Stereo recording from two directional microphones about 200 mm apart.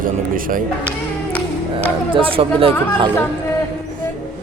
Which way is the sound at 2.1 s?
25° right (ahead or behind).